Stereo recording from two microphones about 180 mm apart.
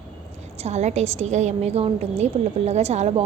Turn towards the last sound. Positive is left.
turn(degrees=-35)  # may be behind; listen again after turning